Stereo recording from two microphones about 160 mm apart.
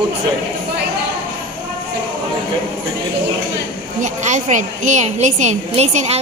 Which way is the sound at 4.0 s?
50° right (ahead or behind).